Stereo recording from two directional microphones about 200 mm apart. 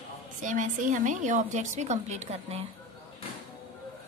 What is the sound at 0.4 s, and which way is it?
A woman's voice, 40° right (ahead or behind).